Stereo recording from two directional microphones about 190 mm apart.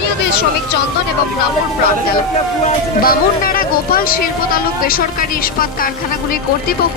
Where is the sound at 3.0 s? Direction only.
50° left (ahead or behind).